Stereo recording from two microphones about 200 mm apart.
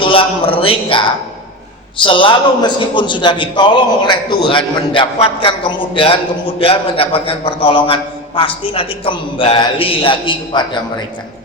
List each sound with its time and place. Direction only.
0.0 s a man's voice: 25° left (ahead or behind)